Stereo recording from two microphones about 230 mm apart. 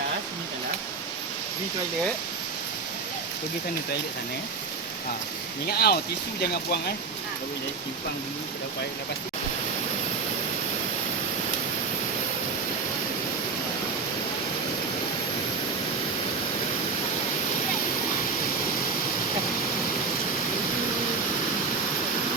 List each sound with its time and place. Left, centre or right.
5.6 s speech: left